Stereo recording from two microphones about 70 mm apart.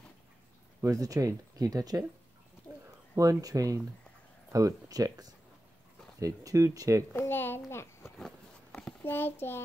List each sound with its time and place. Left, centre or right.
0.8 s speech: right
3.2 s speech: right
7.1 s a child's voice: left
7.7 s a child's voice: left
9.0 s a child's voice: left